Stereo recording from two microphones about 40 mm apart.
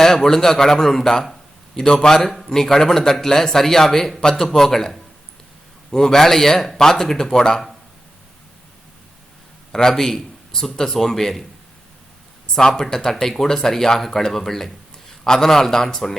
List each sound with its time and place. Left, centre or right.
0.0 s a man's voice: centre
9.7 s a man's voice: centre
12.5 s a man's voice: centre